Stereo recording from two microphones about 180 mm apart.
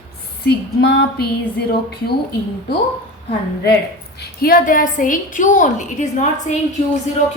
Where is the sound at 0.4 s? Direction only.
65° left (ahead or behind).